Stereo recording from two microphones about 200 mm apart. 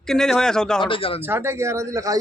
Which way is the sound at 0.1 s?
Centre (ahead or behind).